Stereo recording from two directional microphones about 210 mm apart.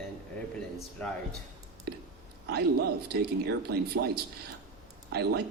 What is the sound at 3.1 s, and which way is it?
Speech, 50° right (ahead or behind).